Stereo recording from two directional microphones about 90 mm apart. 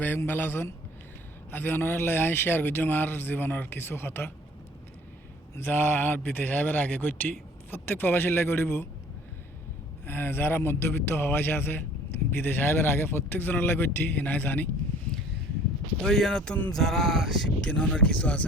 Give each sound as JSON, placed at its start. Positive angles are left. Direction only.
{"t": 0.2, "sound": "a man's voice", "side_deg": 25}
{"t": 5.5, "sound": "a man's voice", "side_deg": 25}
{"t": 10.1, "sound": "a man's voice", "side_deg": 25}
{"t": 16.0, "sound": "speech", "side_deg": 5}
{"t": 17.7, "sound": "speech", "side_deg": 10}